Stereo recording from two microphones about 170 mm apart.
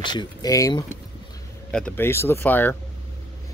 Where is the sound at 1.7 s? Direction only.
5° left (ahead or behind).